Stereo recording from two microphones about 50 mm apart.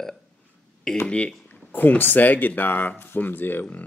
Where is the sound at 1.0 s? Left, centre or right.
Left.